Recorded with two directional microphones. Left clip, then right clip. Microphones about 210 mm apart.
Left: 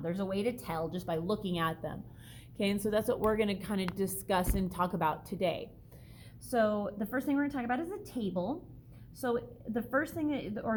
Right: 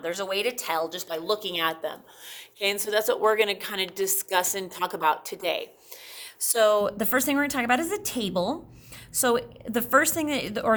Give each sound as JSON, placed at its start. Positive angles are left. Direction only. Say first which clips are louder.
{"t": 0.0, "sound": "a woman's voice", "louder": "right 7 dB", "side_deg": -15}
{"t": 6.4, "sound": "a woman's voice", "louder": "right 9 dB", "side_deg": -35}